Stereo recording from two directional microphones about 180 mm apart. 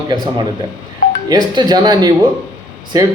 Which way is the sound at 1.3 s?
25° right (ahead or behind).